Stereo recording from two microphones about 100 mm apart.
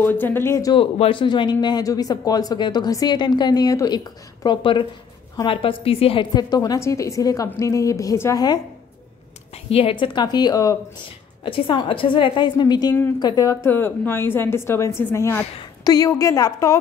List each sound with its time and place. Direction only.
0.0 s a woman's voice: 20° left (ahead or behind)
0.7 s speech: 70° left (ahead or behind); by 4.6 s 45° left (ahead or behind)
5.4 s a woman's voice: 60° left (ahead or behind)
6.3 s a woman's voice: 40° left (ahead or behind)
9.7 s speech: 70° left (ahead or behind); by 10.8 s 35° left (ahead or behind)
11.4 s speech: 60° left (ahead or behind); by 13.5 s 45° left (ahead or behind)
13.5 s a woman's voice: 25° left (ahead or behind)
15.8 s a woman's voice: 40° left (ahead or behind)